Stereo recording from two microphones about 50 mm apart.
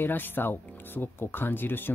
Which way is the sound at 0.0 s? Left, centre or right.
Left.